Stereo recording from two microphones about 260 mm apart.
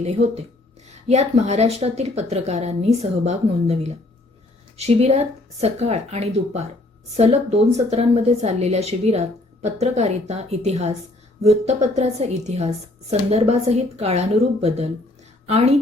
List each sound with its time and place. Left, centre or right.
0.0 s speech: right